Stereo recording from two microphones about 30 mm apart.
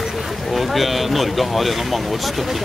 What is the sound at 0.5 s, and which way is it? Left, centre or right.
Speech, centre.